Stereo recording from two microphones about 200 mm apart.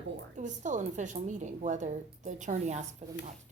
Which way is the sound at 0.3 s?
40° right (ahead or behind).